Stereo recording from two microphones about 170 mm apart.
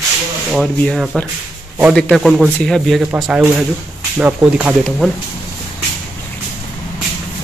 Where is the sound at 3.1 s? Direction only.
10° right (ahead or behind).